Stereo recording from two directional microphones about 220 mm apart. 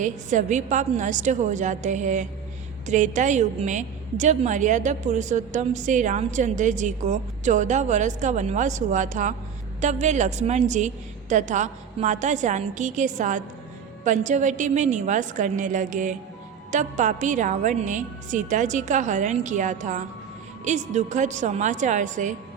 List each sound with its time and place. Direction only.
0.0 s a woman's voice: 35° right (ahead or behind)